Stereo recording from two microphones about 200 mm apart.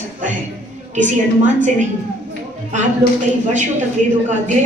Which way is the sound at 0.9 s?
40° right (ahead or behind).